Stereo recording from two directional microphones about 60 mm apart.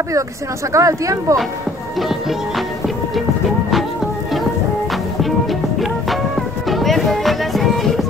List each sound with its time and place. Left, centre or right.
0.7 s speech: right
6.7 s music: centre